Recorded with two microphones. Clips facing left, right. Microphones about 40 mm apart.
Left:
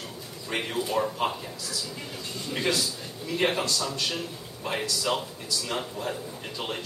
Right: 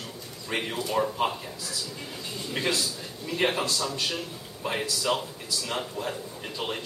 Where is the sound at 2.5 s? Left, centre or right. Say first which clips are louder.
Left 1 dB; centre.